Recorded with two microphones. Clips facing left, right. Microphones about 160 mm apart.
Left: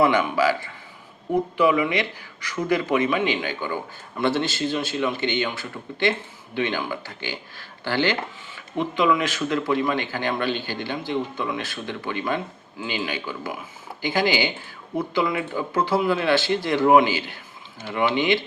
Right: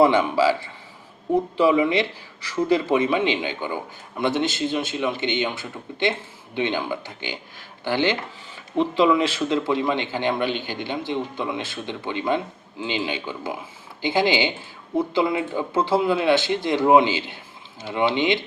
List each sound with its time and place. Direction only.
0.0 s speech: 30° right (ahead or behind)
8.7 s speech: 30° right (ahead or behind)